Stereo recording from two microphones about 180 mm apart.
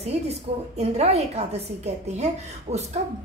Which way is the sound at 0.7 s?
35° right (ahead or behind).